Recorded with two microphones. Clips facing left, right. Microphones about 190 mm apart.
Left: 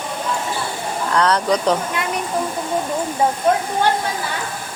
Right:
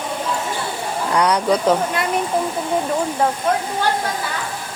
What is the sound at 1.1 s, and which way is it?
Speech, 10° right (ahead or behind).